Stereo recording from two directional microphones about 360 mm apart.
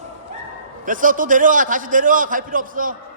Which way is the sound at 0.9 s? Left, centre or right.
Right.